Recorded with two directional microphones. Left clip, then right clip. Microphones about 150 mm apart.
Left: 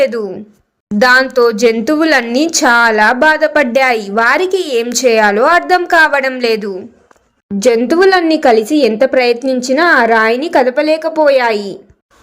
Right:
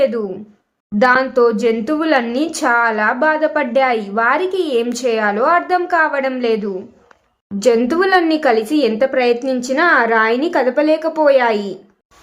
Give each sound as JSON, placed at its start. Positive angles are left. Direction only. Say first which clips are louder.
{"t": 0.0, "sound": "speech", "louder": "left 3 dB", "side_deg": 30}